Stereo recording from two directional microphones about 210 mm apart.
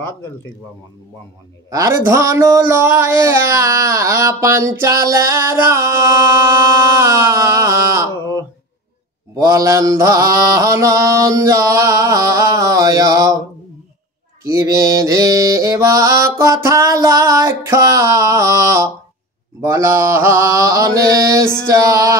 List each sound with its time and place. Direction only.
1.7 s mantra: 15° right (ahead or behind)
6.4 s a sound: 15° right (ahead or behind)
9.3 s mantra: 15° right (ahead or behind)
14.4 s mantra: 15° right (ahead or behind)